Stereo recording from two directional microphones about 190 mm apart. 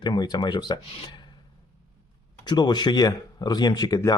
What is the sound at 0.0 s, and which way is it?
Speech, 20° left (ahead or behind).